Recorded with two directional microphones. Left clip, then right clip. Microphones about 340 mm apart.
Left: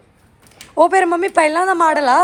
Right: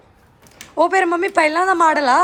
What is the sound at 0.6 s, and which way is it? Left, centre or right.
Speech, centre.